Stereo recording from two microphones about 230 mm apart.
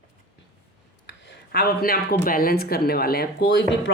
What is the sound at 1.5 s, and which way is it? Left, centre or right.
Speech, left.